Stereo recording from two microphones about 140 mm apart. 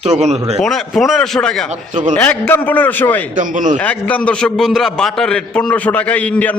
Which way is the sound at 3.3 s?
65° right (ahead or behind).